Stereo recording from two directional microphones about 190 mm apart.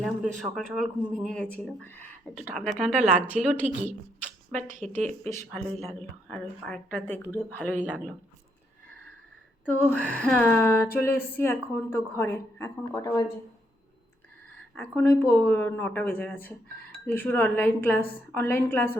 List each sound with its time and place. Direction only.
0.0 s speech: centre (ahead or behind)
4.8 s speech: 40° right (ahead or behind)
5.2 s a woman's voice: 5° left (ahead or behind)
9.6 s a woman's voice: 5° left (ahead or behind)
14.8 s a woman's voice: 10° left (ahead or behind)